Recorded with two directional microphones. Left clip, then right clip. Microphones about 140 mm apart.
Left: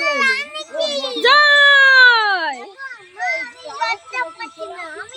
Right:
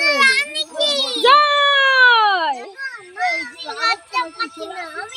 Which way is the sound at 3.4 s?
15° left (ahead or behind).